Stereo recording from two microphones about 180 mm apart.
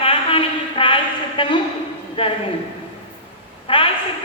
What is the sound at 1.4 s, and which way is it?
Speech, 25° left (ahead or behind).